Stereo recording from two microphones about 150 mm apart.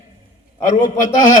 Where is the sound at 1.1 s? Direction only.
55° left (ahead or behind).